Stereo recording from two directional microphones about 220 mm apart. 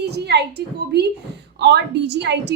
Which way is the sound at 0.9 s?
50° right (ahead or behind).